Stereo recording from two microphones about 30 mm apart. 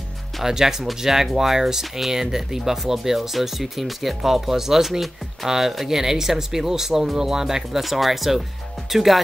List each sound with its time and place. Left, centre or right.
0.4 s speech: centre